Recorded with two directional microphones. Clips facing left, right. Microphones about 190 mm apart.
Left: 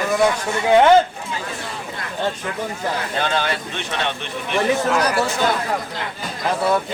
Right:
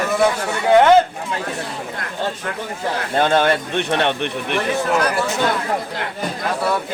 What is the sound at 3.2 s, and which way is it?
Speech, 50° right (ahead or behind).